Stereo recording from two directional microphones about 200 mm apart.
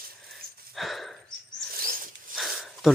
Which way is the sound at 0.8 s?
Centre (ahead or behind).